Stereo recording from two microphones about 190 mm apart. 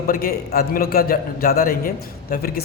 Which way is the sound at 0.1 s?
50° left (ahead or behind).